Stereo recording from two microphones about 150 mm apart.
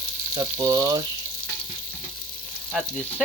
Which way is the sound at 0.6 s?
25° right (ahead or behind).